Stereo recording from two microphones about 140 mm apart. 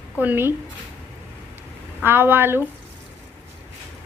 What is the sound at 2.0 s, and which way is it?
Speech, 15° right (ahead or behind).